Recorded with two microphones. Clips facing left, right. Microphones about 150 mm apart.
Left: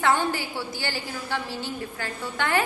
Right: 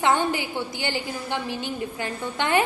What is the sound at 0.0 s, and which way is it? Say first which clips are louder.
A woman's voice: right 1 dB; 20° right (ahead or behind).